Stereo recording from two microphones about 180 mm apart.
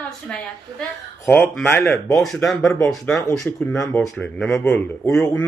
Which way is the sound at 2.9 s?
Centre (ahead or behind).